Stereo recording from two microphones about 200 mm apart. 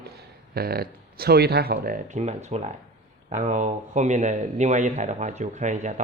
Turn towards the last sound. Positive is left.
turn(degrees=-35)  # may be behind; listen again after turning